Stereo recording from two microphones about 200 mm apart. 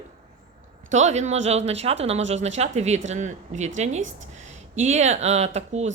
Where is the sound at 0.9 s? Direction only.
35° right (ahead or behind).